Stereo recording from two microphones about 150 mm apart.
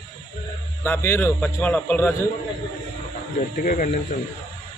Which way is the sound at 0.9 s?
15° left (ahead or behind).